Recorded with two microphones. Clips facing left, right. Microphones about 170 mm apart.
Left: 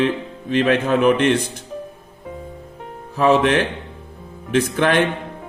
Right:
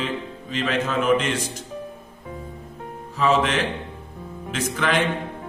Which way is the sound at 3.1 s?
60° left (ahead or behind).